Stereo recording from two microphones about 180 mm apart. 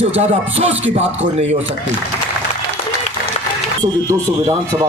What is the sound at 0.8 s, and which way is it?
Speech, 90° right.